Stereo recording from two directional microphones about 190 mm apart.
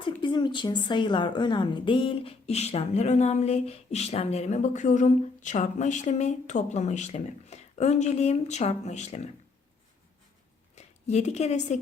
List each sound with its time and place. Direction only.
0.0 s a woman's voice: 25° left (ahead or behind)
10.8 s a woman's voice: 35° left (ahead or behind)